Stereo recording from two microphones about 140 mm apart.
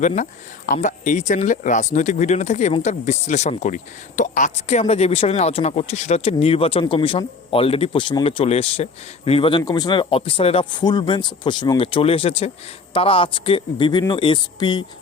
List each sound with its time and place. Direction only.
0.2 s a man's voice: 65° left (ahead or behind); by 14.8 s 30° left (ahead or behind)